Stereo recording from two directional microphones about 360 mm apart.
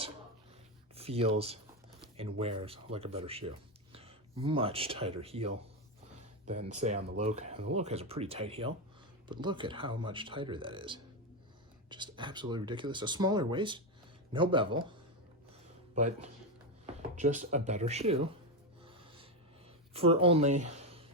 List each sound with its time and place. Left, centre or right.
0.9 s speech: centre
6.7 s speech: centre
16.0 s speech: centre
18.9 s snort: centre
19.9 s speech: centre